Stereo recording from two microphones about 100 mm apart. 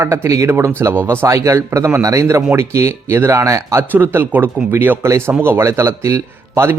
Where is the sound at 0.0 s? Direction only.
25° right (ahead or behind).